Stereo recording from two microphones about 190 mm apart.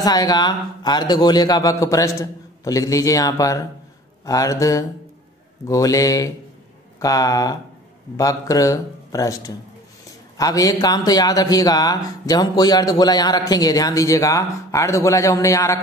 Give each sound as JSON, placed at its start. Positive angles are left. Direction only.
{"t": 0.0, "sound": "a man's voice", "side_deg": 20}